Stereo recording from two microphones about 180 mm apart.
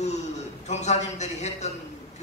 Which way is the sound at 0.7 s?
40° left (ahead or behind).